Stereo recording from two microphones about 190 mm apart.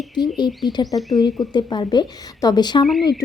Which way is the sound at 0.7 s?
25° left (ahead or behind).